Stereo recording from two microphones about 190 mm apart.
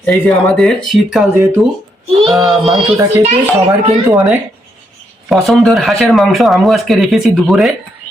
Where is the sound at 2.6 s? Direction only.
30° right (ahead or behind).